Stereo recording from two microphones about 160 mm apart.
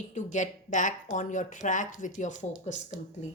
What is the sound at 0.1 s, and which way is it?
A woman's voice, 50° left (ahead or behind).